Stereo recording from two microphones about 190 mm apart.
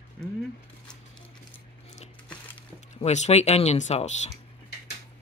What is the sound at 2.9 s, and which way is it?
Speech, 35° left (ahead or behind).